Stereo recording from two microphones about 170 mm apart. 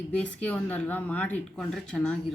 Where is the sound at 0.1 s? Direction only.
5° left (ahead or behind).